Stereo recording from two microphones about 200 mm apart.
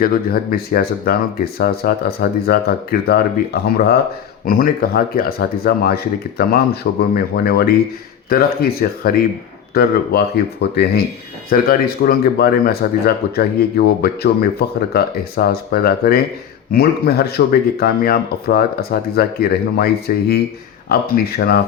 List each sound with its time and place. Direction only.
0.0 s speech: 50° left (ahead or behind)